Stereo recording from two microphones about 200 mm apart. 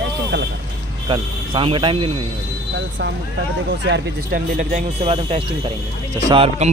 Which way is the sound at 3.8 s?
60° right (ahead or behind).